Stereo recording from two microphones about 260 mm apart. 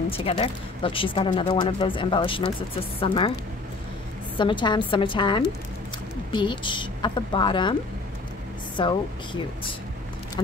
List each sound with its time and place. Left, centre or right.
0.1 s speech: left
4.4 s a woman's voice: centre
8.7 s speech: centre